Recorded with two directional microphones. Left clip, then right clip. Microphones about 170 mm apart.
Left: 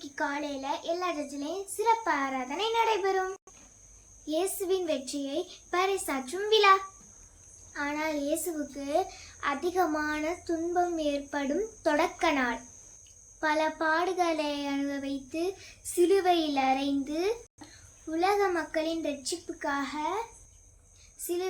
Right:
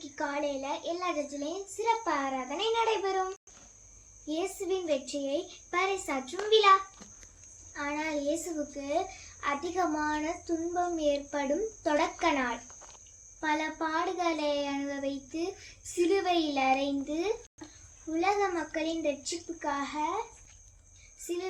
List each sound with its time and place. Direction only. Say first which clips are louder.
0.2 s a child's voice: even; 20° left (ahead or behind)
4.3 s a child's voice: left 3 dB; 25° left (ahead or behind)